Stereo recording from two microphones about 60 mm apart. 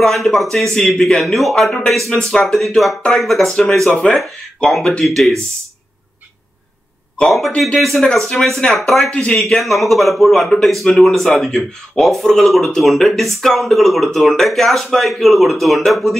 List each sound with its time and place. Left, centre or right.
0.0 s speech: centre
7.2 s speech: centre
9.1 s speech: centre
9.5 s speech: centre